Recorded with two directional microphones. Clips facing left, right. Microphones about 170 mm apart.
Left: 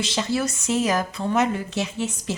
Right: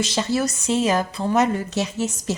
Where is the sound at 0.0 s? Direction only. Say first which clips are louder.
Right 2 dB; 40° right (ahead or behind).